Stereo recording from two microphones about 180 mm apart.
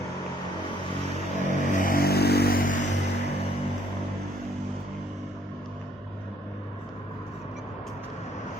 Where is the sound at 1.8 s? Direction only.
55° left (ahead or behind).